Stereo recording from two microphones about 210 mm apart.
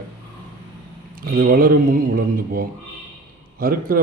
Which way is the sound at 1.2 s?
45° right (ahead or behind).